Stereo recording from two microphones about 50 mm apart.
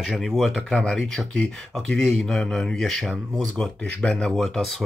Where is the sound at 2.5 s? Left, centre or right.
Centre.